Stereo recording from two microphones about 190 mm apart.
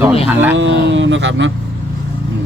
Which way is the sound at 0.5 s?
75° right (ahead or behind).